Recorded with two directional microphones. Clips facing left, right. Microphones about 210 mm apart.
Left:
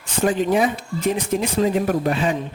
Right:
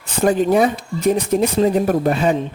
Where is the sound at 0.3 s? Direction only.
40° right (ahead or behind).